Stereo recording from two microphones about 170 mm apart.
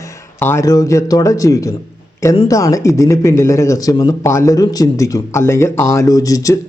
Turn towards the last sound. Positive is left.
turn(degrees=20)  # may be behind; listen again after turning